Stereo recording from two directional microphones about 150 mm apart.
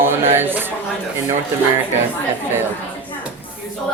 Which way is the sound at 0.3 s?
15° right (ahead or behind).